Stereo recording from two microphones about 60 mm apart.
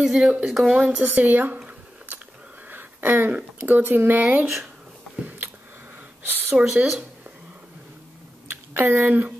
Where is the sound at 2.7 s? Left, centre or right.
Right.